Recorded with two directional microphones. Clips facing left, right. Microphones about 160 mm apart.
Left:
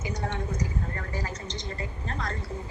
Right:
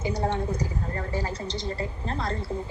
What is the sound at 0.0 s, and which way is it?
A woman's voice, 30° right (ahead or behind).